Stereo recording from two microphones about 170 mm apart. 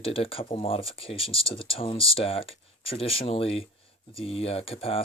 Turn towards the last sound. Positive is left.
turn(degrees=35)  # may be behind; listen again after turning